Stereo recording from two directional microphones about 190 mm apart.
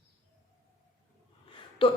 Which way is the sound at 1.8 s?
30° left (ahead or behind).